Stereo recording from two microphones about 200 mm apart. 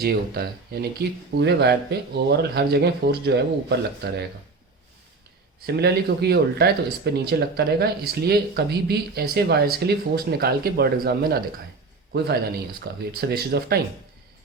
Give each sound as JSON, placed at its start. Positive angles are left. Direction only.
{"t": 0.0, "sound": "speech", "side_deg": -50}
{"t": 5.6, "sound": "speech", "side_deg": -55}
{"t": 12.8, "sound": "speech", "side_deg": -50}